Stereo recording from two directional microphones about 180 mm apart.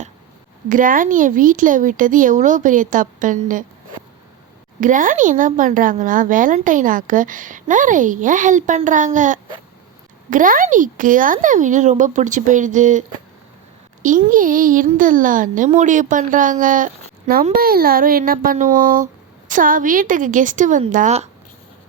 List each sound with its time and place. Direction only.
0.7 s a woman's voice: 50° right (ahead or behind)
4.8 s a woman's voice: 45° right (ahead or behind)
14.3 s a woman's voice: 50° right (ahead or behind)